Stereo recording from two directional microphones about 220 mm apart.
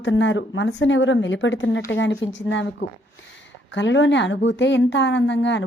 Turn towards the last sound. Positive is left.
turn(degrees=55)  # may be behind; listen again after turning